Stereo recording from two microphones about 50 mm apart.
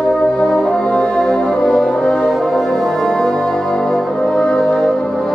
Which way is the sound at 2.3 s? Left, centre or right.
Centre.